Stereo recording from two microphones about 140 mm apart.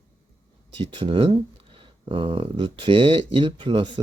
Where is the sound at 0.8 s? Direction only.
40° right (ahead or behind).